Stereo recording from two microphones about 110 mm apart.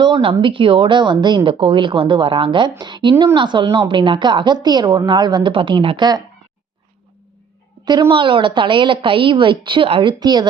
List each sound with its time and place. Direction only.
0.0 s a woman's voice: 50° right (ahead or behind)
8.1 s a woman's voice: 50° right (ahead or behind)